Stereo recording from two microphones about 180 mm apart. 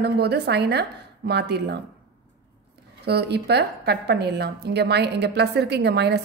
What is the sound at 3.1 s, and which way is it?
A woman's voice, 65° right (ahead or behind).